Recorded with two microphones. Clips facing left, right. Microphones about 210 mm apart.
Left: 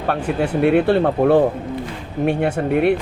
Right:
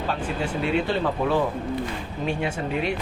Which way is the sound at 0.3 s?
60° left (ahead or behind).